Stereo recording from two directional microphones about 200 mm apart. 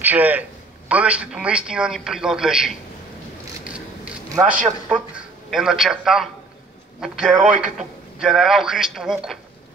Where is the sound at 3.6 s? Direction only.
5° right (ahead or behind).